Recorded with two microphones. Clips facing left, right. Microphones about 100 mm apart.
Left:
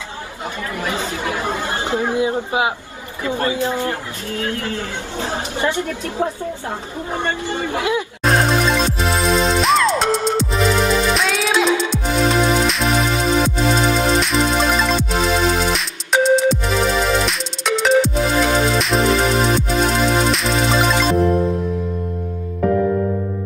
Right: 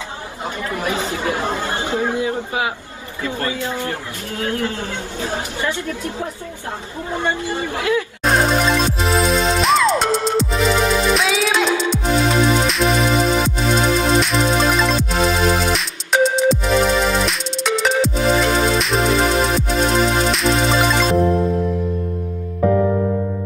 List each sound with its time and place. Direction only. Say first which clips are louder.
0.7 s speech: right 2 dB; 25° right (ahead or behind)
1.8 s speech: left 3 dB; 20° left (ahead or behind)
4.3 s speech: right 1 dB; 25° right (ahead or behind)
5.2 s speech: left 2 dB; 25° left (ahead or behind)
7.7 s speech: right 1 dB; 20° left (ahead or behind)
8.2 s music: left 1 dB; centre (ahead or behind)